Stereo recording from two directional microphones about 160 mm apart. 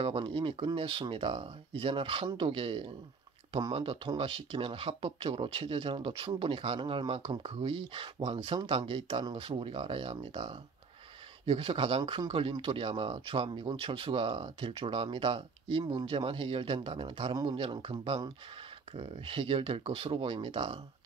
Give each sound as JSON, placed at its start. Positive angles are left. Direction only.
{"t": 0.0, "sound": "speech", "side_deg": -35}